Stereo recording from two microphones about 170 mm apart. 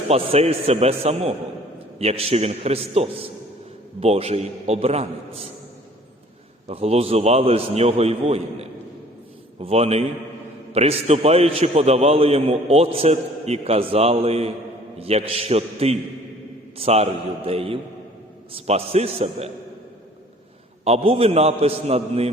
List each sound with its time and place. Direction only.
0.1 s a man's voice: 35° right (ahead or behind)
6.7 s a man's voice: 35° right (ahead or behind)
20.8 s a man's voice: 35° right (ahead or behind)